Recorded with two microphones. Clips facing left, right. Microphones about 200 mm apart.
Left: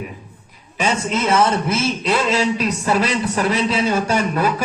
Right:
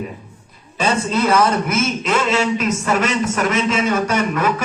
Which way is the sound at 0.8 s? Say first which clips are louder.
Right 2 dB; 15° left (ahead or behind).